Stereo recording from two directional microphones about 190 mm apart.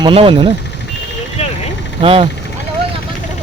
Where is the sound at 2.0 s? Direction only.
30° right (ahead or behind).